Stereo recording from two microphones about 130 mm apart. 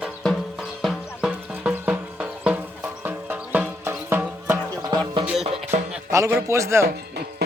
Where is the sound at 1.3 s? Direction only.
10° right (ahead or behind).